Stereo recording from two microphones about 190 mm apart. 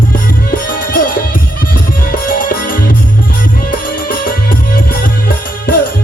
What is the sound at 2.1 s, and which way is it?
Music, 50° left (ahead or behind).